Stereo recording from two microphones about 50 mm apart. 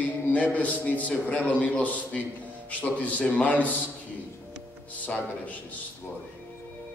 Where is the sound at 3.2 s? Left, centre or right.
Left.